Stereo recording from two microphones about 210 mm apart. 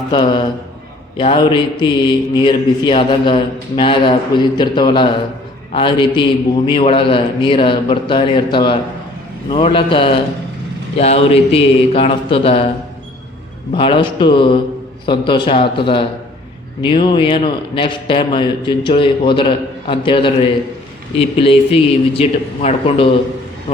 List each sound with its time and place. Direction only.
0.1 s a man's voice: 20° left (ahead or behind)
13.7 s a man's voice: 25° left (ahead or behind)